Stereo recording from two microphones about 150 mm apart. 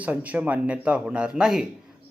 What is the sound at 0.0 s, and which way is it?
Speech, 10° right (ahead or behind).